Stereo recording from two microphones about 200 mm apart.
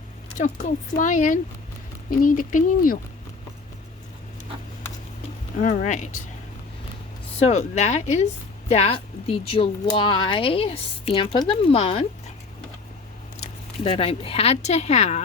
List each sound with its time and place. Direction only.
0.3 s speech: 40° left (ahead or behind)
5.5 s speech: 40° left (ahead or behind)
7.3 s speech: 35° left (ahead or behind)
13.8 s speech: 25° left (ahead or behind)